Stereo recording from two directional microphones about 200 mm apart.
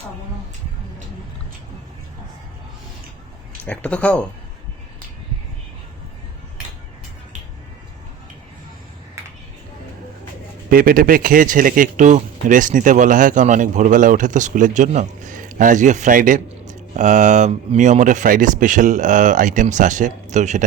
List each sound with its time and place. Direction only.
3.7 s speech: 5° left (ahead or behind)
10.7 s speech: 45° right (ahead or behind)